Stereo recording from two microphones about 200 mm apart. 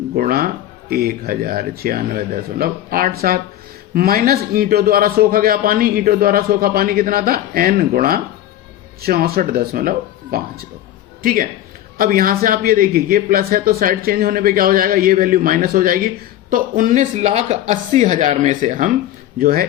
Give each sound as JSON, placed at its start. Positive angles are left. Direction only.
{"t": 0.2, "sound": "a man's voice", "side_deg": -45}
{"t": 11.2, "sound": "a man's voice", "side_deg": -45}